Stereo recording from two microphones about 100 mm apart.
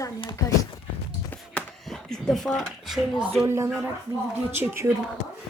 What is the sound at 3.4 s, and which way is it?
Speech, 30° right (ahead or behind).